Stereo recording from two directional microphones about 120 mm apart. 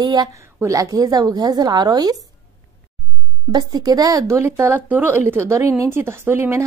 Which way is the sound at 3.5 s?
35° right (ahead or behind).